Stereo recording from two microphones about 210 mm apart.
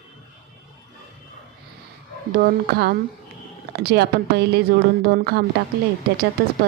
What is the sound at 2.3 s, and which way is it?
Speech, 50° right (ahead or behind).